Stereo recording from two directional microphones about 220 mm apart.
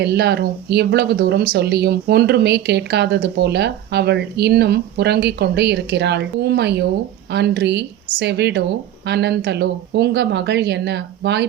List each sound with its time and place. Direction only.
0.0 s speech: 50° right (ahead or behind)